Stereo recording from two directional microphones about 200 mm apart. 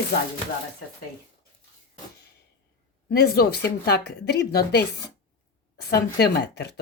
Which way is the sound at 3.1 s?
50° left (ahead or behind).